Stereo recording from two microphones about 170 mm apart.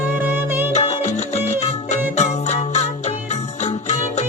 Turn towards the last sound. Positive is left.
turn(degrees=40)  # may be behind; listen again after turning